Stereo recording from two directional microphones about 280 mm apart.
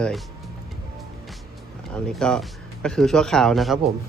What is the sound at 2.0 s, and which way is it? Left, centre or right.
A man's voice, centre.